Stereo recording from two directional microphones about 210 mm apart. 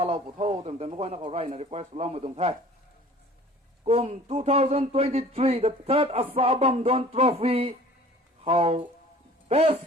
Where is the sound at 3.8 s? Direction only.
30° right (ahead or behind).